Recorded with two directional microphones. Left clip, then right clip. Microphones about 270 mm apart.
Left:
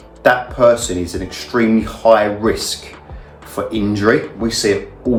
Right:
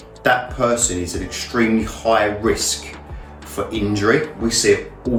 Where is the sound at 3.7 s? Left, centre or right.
Centre.